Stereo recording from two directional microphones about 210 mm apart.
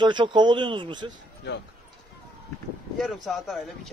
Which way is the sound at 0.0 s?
20° right (ahead or behind).